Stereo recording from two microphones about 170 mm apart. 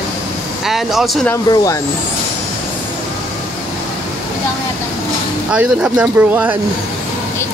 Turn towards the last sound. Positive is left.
turn(degrees=-10)  # may be behind; listen again after turning